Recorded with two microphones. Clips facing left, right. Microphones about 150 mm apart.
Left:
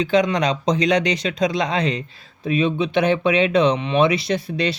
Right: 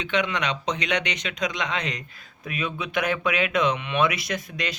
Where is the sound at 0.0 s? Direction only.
35° left (ahead or behind).